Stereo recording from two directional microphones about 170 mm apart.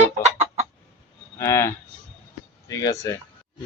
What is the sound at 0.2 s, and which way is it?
Chicken, 40° right (ahead or behind).